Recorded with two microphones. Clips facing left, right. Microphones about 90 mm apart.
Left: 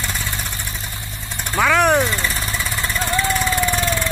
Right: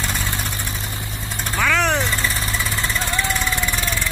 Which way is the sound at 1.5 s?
15° left (ahead or behind).